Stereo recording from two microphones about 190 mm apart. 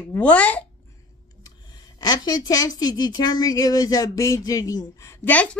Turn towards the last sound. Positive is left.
turn(degrees=10)  # may be behind; listen again after turning